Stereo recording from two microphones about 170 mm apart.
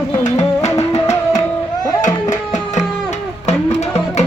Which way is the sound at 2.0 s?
45° left (ahead or behind).